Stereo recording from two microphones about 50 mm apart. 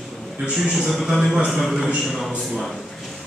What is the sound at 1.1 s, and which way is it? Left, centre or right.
A man's voice, centre.